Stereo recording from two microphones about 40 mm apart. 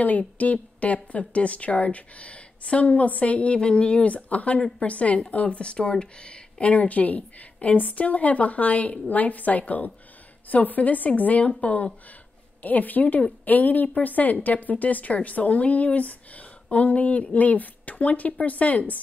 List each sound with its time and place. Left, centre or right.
0.4 s speech: left
6.7 s speech: left
12.6 s a woman's voice: left